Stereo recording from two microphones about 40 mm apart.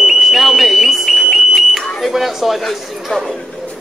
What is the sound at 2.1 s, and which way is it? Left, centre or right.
Dishes, centre.